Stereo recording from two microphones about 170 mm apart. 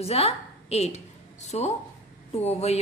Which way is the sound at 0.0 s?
35° left (ahead or behind).